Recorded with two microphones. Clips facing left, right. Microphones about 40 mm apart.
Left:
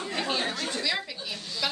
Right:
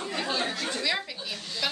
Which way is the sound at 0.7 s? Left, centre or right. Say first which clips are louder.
Right 1 dB; centre.